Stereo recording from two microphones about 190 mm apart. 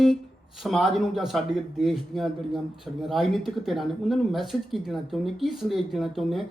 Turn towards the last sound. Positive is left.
turn(degrees=0)  # may be behind; listen again after turning